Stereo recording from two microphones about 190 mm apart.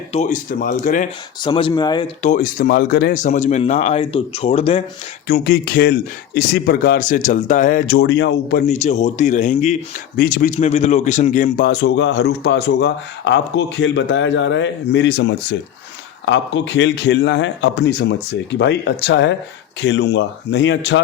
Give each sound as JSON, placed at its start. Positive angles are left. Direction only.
{"t": 0.1, "sound": "a man's voice", "side_deg": 40}
{"t": 1.4, "sound": "speech", "side_deg": 25}
{"t": 2.2, "sound": "speech", "side_deg": 45}
{"t": 5.3, "sound": "a man's voice", "side_deg": 55}
{"t": 7.9, "sound": "speech", "side_deg": 70}
{"t": 8.7, "sound": "speech", "side_deg": 40}